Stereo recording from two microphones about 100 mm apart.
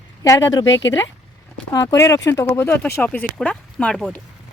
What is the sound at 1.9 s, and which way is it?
Speech, 30° left (ahead or behind).